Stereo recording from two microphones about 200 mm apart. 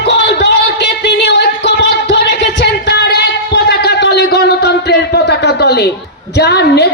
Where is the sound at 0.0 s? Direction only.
60° left (ahead or behind).